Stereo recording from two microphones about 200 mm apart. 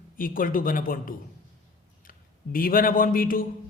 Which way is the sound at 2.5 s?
45° left (ahead or behind).